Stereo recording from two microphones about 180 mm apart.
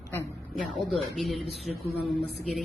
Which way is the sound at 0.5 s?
Centre (ahead or behind).